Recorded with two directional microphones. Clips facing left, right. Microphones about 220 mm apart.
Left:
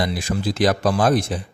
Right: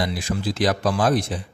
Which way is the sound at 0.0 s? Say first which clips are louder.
Left 2 dB; 45° left (ahead or behind).